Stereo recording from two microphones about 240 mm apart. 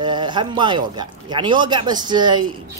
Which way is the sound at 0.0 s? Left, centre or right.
Centre.